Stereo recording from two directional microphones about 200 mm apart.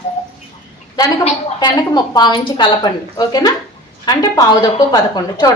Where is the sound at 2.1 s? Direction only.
20° left (ahead or behind).